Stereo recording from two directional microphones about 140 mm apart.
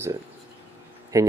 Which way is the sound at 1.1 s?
20° right (ahead or behind).